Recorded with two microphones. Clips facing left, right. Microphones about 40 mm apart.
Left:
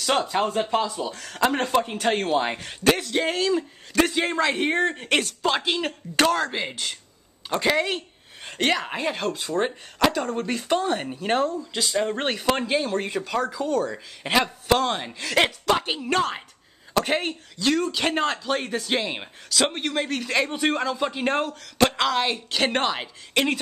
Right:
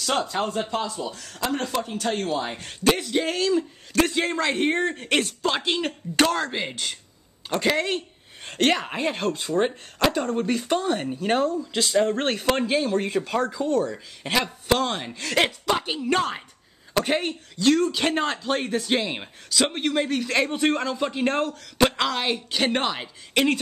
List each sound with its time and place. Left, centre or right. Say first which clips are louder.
0.0 s speech: left 2 dB; left
1.0 s speech: left 5 dB; left
2.6 s speech: left 1 dB; centre
13.3 s speech: right 1 dB; centre
13.8 s speech: left 1 dB; centre
16.1 s speech: even; centre